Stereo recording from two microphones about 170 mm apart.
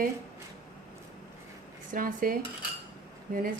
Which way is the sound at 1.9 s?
55° right (ahead or behind).